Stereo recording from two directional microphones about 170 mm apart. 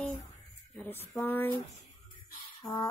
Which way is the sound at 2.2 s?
55° left (ahead or behind).